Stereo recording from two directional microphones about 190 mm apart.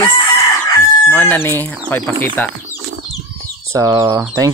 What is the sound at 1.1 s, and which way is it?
Speech, 10° left (ahead or behind).